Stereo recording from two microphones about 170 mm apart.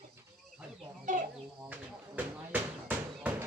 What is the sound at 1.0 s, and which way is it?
Chicken, 50° right (ahead or behind).